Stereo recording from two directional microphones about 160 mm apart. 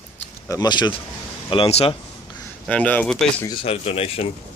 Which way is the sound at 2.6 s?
10° left (ahead or behind).